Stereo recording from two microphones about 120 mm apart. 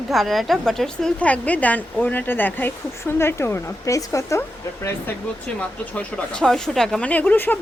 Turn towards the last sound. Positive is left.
turn(degrees=15)  # may be behind; listen again after turning